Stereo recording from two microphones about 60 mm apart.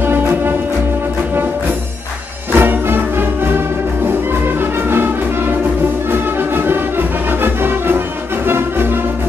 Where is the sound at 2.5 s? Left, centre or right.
Right.